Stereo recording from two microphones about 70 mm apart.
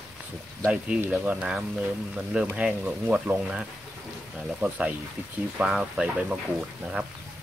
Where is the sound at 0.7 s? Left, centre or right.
Centre.